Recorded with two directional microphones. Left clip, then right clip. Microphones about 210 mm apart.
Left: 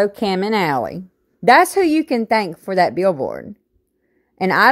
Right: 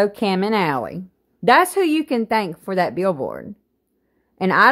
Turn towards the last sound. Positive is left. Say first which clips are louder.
# even
turn(degrees=20)  # may be behind; listen again after turning